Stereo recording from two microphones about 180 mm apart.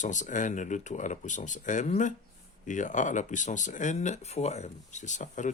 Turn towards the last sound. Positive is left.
turn(degrees=40)  # may be behind; listen again after turning